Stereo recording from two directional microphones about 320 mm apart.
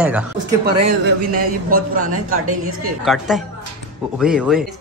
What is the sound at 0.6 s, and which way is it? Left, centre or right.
A man's voice, right.